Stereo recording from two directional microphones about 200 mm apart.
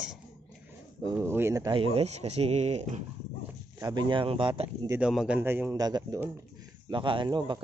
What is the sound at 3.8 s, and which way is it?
Speech, 20° right (ahead or behind).